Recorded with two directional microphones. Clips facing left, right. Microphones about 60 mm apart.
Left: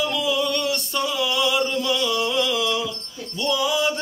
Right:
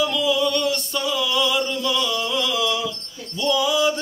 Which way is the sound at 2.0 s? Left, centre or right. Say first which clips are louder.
Left 2 dB; centre.